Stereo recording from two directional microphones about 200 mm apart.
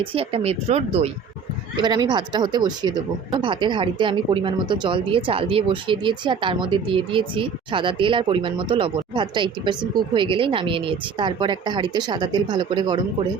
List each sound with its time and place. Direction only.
0.0 s speech: 25° right (ahead or behind)
1.7 s speech: 20° right (ahead or behind)